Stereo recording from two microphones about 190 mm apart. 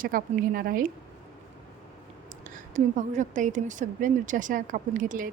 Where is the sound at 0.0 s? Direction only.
45° right (ahead or behind).